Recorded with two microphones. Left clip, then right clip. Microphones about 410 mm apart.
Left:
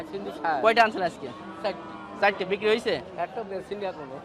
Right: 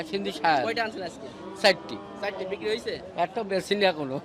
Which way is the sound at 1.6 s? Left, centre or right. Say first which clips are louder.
Right 9 dB; right.